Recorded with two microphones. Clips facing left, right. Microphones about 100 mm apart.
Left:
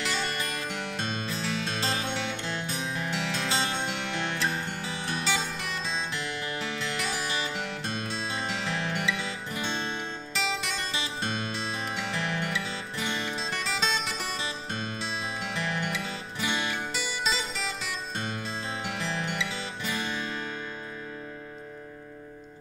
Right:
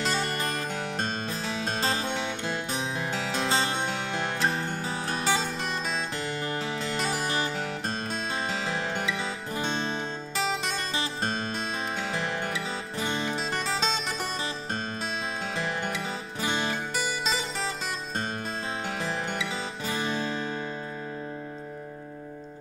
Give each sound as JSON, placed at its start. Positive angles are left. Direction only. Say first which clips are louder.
{"t": 0.0, "sound": "music", "louder": "right 3 dB", "side_deg": -40}
{"t": 15.8, "sound": "music", "louder": "right 1 dB", "side_deg": -35}